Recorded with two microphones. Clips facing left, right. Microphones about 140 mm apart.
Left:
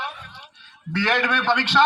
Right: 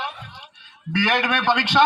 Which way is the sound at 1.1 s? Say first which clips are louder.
Even; 20° right (ahead or behind).